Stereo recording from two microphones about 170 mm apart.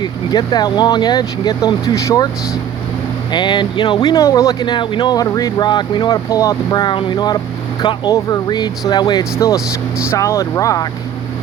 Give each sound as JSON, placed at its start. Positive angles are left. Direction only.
{"t": 0.0, "sound": "speech", "side_deg": 25}
{"t": 3.3, "sound": "speech", "side_deg": 25}